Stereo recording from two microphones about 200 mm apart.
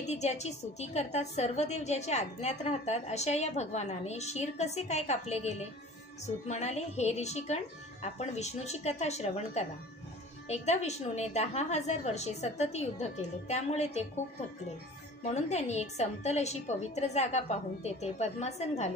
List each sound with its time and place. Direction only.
0.0 s a woman's voice: 35° left (ahead or behind)
15.2 s a woman's voice: 35° left (ahead or behind)